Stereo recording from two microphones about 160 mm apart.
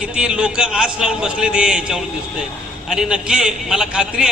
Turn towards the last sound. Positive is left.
turn(degrees=-5)  # may be behind; listen again after turning